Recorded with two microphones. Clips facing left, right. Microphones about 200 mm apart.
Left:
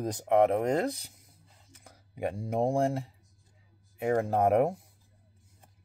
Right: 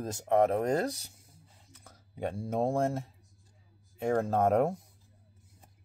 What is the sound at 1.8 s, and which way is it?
Speech, 10° left (ahead or behind).